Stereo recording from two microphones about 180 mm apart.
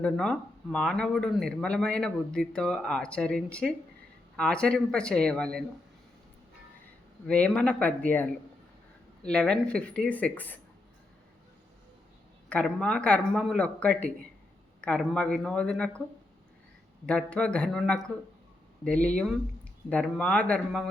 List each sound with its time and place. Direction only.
0.0 s speech: 5° left (ahead or behind)
7.3 s speech: 5° left (ahead or behind)
12.5 s speech: 5° left (ahead or behind)
17.1 s speech: 5° left (ahead or behind)